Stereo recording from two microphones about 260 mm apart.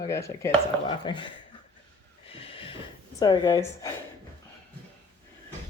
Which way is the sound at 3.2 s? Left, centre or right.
Centre.